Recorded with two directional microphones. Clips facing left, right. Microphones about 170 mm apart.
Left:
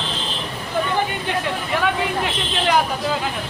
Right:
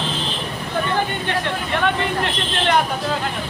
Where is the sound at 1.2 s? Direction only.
5° left (ahead or behind).